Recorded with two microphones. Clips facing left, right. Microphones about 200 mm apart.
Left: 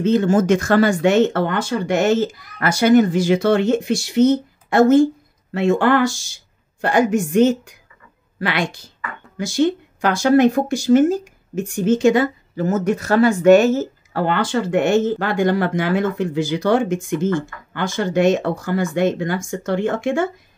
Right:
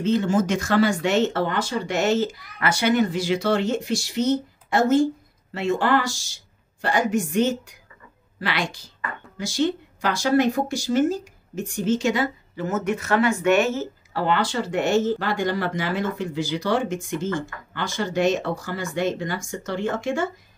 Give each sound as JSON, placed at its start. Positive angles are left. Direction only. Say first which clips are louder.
{"t": 0.0, "sound": "a woman's voice", "louder": "left 5 dB", "side_deg": 50}